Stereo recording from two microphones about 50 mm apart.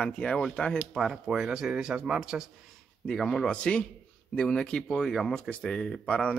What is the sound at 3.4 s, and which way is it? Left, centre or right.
Speech, left.